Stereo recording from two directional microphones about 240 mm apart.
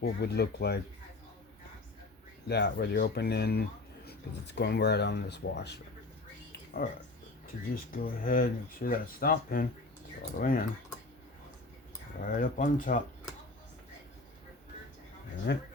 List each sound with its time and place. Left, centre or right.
0.0 s speech: left
2.5 s speech: left
7.4 s speech: left
12.2 s speech: left
15.5 s speech: left